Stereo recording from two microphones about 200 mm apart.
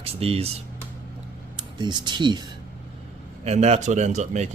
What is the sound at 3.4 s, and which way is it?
Speech, 35° right (ahead or behind).